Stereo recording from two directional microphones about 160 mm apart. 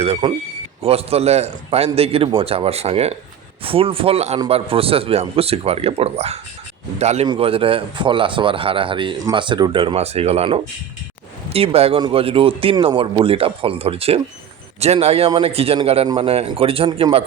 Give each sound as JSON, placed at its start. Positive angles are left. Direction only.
{"t": 0.0, "sound": "a man's voice", "side_deg": -35}